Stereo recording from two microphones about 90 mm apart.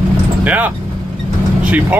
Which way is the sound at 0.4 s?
20° right (ahead or behind).